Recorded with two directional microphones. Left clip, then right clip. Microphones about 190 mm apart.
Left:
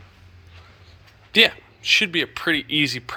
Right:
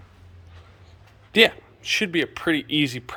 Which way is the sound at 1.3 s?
15° right (ahead or behind).